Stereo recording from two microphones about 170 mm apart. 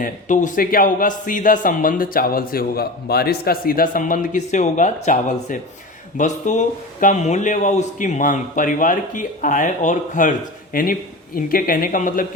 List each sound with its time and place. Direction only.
0.0 s a man's voice: 50° left (ahead or behind)